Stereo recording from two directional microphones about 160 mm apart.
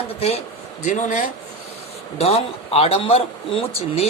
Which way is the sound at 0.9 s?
50° left (ahead or behind).